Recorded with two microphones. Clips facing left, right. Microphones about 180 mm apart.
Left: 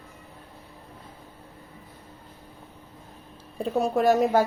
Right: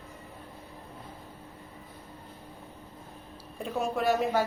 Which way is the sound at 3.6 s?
40° left (ahead or behind).